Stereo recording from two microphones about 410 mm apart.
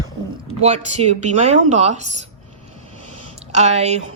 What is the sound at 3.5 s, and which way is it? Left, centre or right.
Speech, centre.